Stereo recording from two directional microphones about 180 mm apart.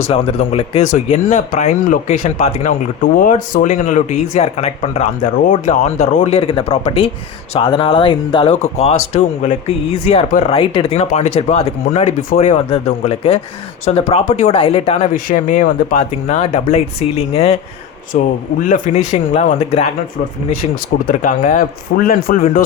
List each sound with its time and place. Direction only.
0.1 s speech: 35° left (ahead or behind)
15.1 s speech: 45° left (ahead or behind)
21.1 s speech: 45° left (ahead or behind)